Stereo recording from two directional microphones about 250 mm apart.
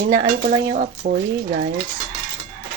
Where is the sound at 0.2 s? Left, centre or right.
Right.